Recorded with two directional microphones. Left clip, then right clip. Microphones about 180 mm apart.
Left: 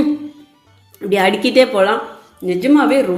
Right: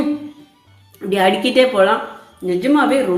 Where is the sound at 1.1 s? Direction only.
25° left (ahead or behind).